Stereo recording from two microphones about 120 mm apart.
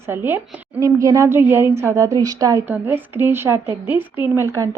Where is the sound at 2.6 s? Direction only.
15° right (ahead or behind).